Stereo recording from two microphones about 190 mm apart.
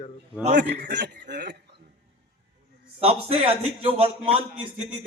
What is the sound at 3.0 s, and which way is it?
A man's voice, 30° right (ahead or behind).